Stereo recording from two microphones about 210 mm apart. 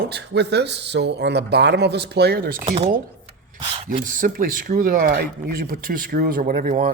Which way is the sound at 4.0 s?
40° right (ahead or behind).